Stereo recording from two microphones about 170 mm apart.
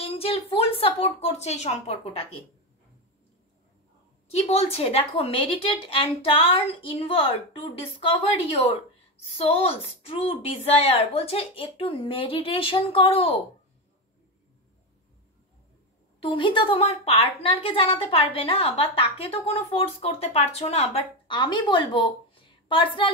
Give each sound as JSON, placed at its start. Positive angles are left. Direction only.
{"t": 0.0, "sound": "a woman's voice", "side_deg": 35}
{"t": 4.3, "sound": "a woman's voice", "side_deg": 35}
{"t": 9.4, "sound": "a woman's voice", "side_deg": 35}
{"t": 16.2, "sound": "a woman's voice", "side_deg": 30}